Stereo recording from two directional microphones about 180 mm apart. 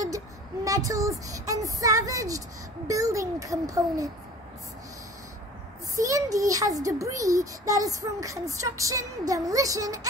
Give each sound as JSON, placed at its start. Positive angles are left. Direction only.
{"t": 0.7, "sound": "a child's voice", "side_deg": -20}
{"t": 5.9, "sound": "a child's voice", "side_deg": -20}